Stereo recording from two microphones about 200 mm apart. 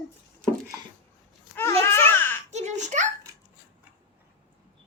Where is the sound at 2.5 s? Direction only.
35° right (ahead or behind).